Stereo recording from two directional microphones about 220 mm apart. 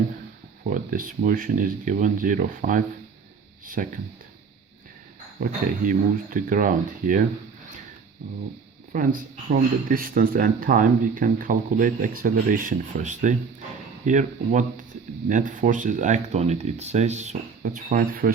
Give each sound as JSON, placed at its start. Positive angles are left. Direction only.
{"t": 0.7, "sound": "speech", "side_deg": -40}
{"t": 5.4, "sound": "speech", "side_deg": -40}
{"t": 8.9, "sound": "speech", "side_deg": -40}